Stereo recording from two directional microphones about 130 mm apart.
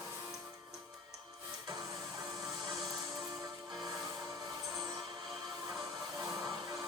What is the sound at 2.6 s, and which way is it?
Music, 30° right (ahead or behind).